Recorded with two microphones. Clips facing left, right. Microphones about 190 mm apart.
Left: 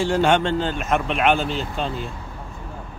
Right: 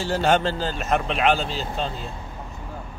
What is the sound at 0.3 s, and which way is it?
Speech, 35° right (ahead or behind).